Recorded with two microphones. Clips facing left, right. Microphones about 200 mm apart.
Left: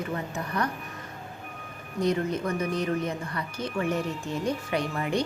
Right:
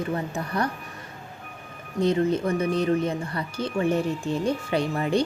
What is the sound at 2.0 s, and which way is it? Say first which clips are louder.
Speech: right 4 dB; 30° right (ahead or behind).